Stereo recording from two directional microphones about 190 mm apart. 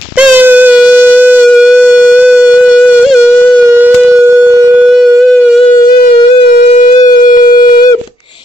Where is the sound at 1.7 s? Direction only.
10° right (ahead or behind).